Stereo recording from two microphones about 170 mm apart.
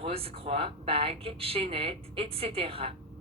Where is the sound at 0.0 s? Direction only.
35° right (ahead or behind).